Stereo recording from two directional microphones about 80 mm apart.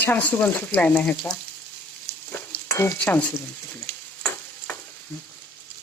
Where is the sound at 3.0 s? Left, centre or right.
Centre.